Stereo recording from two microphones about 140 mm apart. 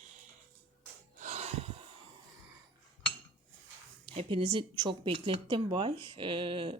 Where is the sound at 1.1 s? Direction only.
60° right (ahead or behind).